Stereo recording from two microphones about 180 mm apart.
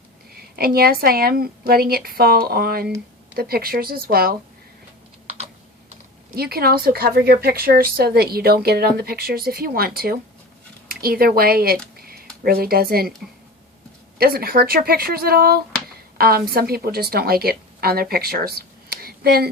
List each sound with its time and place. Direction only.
0.3 s a woman's voice: 55° right (ahead or behind)
6.3 s a woman's voice: 60° right (ahead or behind)
11.9 s a sound: 55° right (ahead or behind)
14.2 s a woman's voice: 55° right (ahead or behind)